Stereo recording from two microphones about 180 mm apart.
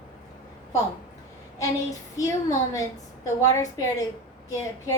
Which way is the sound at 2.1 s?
20° left (ahead or behind).